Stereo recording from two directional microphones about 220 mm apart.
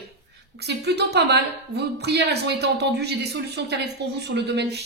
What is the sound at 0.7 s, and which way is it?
A woman's voice, 50° right (ahead or behind).